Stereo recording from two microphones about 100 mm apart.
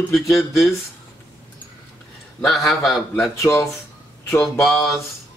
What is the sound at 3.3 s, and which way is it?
Speech, 25° left (ahead or behind).